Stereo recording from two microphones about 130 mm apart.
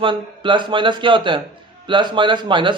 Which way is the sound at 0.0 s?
40° right (ahead or behind).